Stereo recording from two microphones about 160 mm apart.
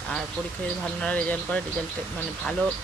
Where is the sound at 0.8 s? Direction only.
5° left (ahead or behind).